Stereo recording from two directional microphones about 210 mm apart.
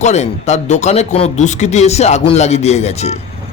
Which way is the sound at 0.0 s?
35° left (ahead or behind).